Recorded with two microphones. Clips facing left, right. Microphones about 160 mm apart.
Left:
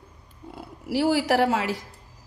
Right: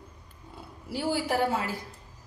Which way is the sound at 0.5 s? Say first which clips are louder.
Left 9 dB; 90° left.